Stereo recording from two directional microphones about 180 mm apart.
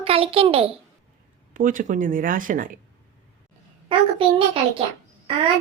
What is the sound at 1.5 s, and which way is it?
Speech, 50° right (ahead or behind).